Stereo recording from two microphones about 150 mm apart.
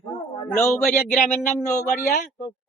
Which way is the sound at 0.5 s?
15° left (ahead or behind).